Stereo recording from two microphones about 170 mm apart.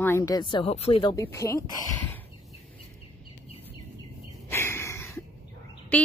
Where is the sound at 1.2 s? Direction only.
15° left (ahead or behind).